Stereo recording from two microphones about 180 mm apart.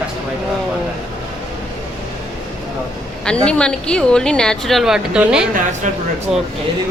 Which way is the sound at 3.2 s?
5° left (ahead or behind).